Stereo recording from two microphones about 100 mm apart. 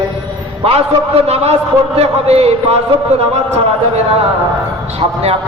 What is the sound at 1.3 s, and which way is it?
A man's voice, 90° right.